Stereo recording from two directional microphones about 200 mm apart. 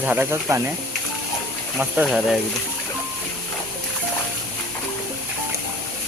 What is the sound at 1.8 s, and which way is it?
Speech, 5° right (ahead or behind).